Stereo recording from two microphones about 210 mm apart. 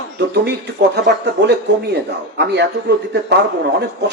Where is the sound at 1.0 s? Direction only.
55° right (ahead or behind).